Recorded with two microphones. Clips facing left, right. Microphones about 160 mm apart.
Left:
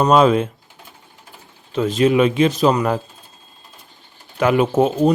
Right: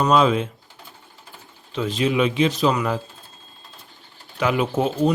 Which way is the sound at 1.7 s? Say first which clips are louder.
Left 6 dB; 45° left (ahead or behind).